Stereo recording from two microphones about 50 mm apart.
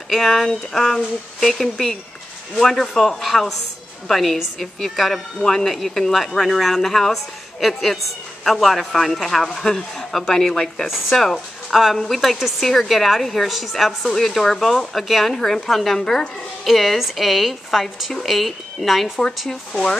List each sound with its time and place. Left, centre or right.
0.1 s speech: centre
19.7 s speech: centre